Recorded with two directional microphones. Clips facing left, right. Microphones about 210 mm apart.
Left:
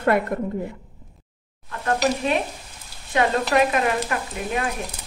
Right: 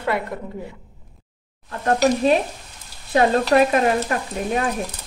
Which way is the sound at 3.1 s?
40° right (ahead or behind).